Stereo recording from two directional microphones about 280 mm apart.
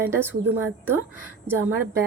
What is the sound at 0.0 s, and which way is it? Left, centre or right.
A woman's voice, centre.